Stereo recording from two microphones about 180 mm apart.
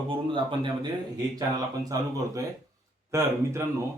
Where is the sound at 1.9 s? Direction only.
20° right (ahead or behind).